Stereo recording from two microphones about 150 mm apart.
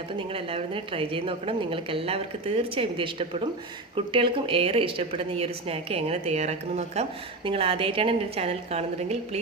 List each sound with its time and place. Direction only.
0.2 s a woman's voice: 40° right (ahead or behind)